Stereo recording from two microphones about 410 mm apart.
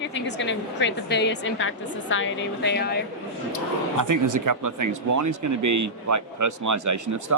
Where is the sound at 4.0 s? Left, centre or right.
Right.